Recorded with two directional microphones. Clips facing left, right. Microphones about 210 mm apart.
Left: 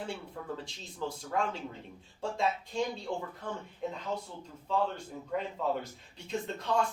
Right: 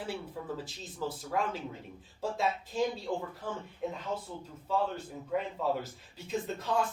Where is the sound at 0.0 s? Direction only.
5° right (ahead or behind).